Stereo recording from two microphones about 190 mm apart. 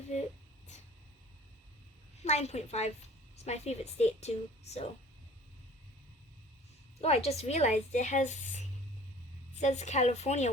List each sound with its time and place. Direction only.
2.2 s speech: 35° left (ahead or behind)
7.0 s speech: 35° left (ahead or behind)